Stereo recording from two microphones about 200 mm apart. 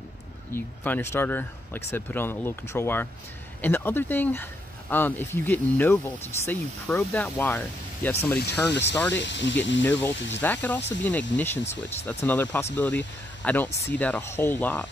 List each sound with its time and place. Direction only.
0.5 s speech: 10° left (ahead or behind)
9.2 s speech: 65° left (ahead or behind)
9.8 s speech: 10° left (ahead or behind)
10.1 s speech: 65° left (ahead or behind)
10.4 s speech: 10° left (ahead or behind)